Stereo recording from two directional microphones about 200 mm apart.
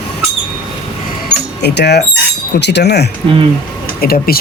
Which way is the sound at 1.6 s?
55° left (ahead or behind).